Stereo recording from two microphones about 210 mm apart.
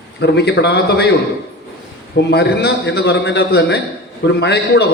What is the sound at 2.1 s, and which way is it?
A man's voice, 50° left (ahead or behind).